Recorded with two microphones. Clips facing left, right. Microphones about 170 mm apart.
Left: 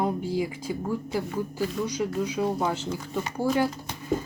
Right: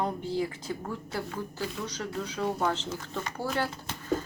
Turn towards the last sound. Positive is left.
turn(degrees=15)  # may be behind; listen again after turning